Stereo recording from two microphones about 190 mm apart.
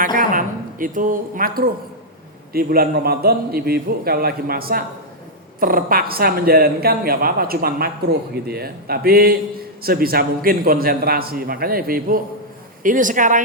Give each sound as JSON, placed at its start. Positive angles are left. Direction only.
{"t": 0.0, "sound": "a woman's voice", "side_deg": -45}